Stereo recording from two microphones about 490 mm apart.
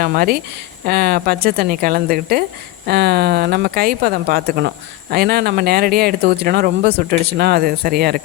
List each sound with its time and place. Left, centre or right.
0.0 s speech: centre